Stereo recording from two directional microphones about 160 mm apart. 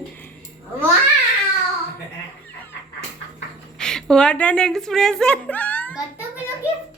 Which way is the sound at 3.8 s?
5° left (ahead or behind).